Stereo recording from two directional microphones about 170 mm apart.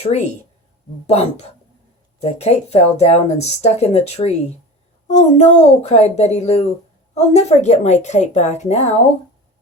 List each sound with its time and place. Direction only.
0.1 s speech: 40° left (ahead or behind)